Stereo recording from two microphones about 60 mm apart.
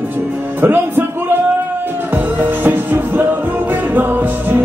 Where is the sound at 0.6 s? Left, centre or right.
Right.